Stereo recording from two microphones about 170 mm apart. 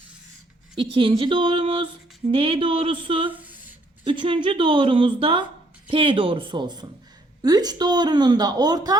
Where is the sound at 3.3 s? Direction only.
10° right (ahead or behind).